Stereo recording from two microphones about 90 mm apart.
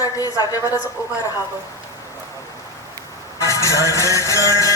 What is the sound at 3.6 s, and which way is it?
Music, 35° right (ahead or behind).